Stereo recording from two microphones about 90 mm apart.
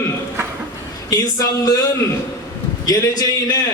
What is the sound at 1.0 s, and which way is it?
Speech, 45° left (ahead or behind).